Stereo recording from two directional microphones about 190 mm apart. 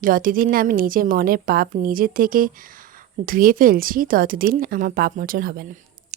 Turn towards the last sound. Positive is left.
turn(degrees=-50)  # may be behind; listen again after turning